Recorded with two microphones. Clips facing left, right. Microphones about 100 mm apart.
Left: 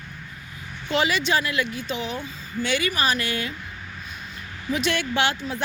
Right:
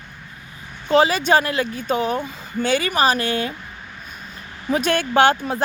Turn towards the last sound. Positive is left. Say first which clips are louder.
# right 8 dB
turn(degrees=-45)  # may be behind; listen again after turning